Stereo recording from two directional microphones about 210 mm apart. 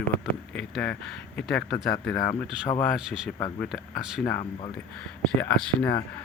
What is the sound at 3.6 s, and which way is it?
Speech, centre (ahead or behind).